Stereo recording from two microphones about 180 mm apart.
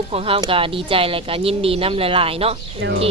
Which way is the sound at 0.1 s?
30° right (ahead or behind).